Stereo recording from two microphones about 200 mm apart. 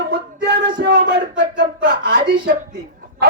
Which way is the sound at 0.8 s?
60° right (ahead or behind).